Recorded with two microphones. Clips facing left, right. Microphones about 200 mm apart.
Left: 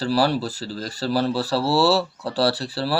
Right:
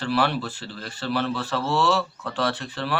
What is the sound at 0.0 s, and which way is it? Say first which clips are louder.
Speech: left 3 dB; 35° left (ahead or behind).